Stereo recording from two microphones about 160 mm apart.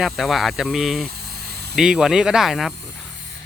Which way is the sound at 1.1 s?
80° right.